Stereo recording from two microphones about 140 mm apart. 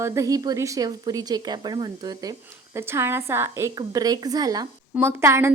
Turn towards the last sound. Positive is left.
turn(degrees=-20)  # may be behind; listen again after turning